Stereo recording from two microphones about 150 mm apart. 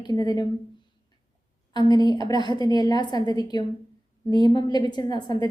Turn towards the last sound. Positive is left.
turn(degrees=30)  # may be behind; listen again after turning